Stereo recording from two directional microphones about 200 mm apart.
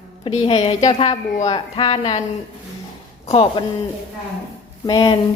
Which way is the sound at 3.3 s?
25° left (ahead or behind).